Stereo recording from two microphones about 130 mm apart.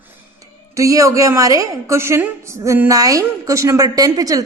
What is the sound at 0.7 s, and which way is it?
A woman's voice, 25° right (ahead or behind).